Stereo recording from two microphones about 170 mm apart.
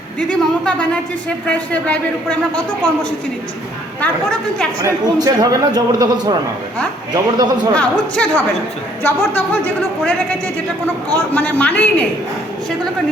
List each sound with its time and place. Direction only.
0.2 s a woman's voice: 5° left (ahead or behind)
4.0 s a woman's voice: 5° left (ahead or behind)
4.8 s a man's voice: 20° right (ahead or behind)
7.8 s a man's voice: 5° left (ahead or behind)
11.3 s a man's voice: 10° left (ahead or behind)